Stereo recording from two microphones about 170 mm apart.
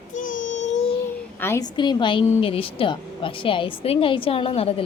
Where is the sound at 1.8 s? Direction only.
25° left (ahead or behind).